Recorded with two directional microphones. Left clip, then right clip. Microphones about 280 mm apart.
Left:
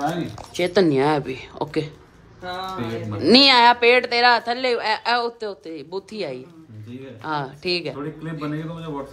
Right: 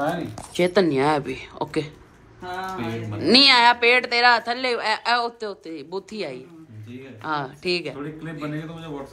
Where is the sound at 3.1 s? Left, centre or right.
Centre.